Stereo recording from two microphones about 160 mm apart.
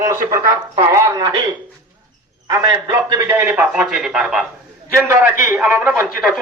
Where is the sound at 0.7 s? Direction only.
20° right (ahead or behind).